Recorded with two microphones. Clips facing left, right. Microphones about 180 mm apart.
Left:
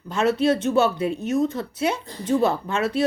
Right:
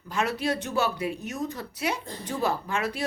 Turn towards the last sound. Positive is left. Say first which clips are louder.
# left 7 dB
turn(degrees=25)  # may be behind; listen again after turning